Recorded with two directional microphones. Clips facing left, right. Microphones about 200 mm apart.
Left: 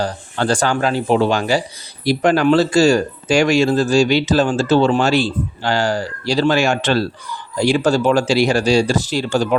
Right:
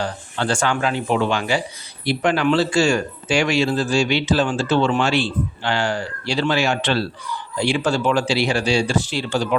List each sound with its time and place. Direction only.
0.0 s speech: 40° left (ahead or behind)